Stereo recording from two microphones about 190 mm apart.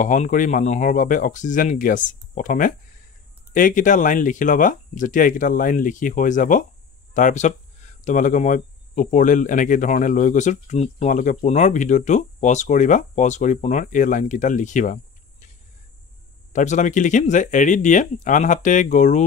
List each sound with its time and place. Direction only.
0.0 s speech: 45° left (ahead or behind)
16.5 s speech: 40° left (ahead or behind)